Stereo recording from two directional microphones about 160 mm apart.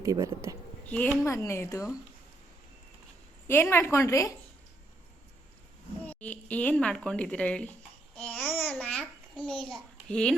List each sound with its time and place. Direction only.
0.0 s speech: 20° right (ahead or behind)
0.9 s a woman's voice: 10° left (ahead or behind)
3.4 s a woman's voice: 15° left (ahead or behind)
6.1 s a sound: 10° left (ahead or behind)